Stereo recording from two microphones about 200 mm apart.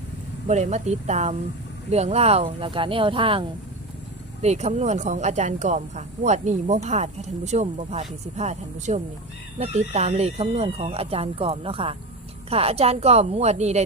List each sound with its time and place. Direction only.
0.4 s speech: 35° right (ahead or behind)
4.4 s speech: 35° right (ahead or behind)